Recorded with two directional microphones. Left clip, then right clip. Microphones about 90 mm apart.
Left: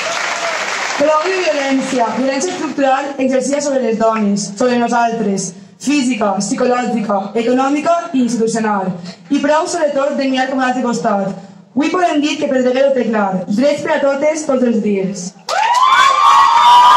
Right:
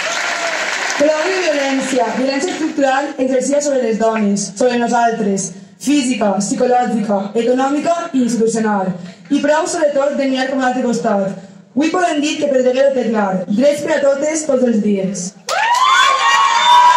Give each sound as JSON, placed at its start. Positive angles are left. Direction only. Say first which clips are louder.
{"t": 0.9, "sound": "speech", "louder": "left 2 dB", "side_deg": -35}
{"t": 15.5, "sound": "emergency vehicle", "louder": "left 1 dB", "side_deg": -35}